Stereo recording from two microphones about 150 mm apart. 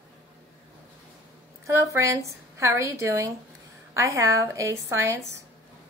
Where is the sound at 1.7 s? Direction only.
20° right (ahead or behind).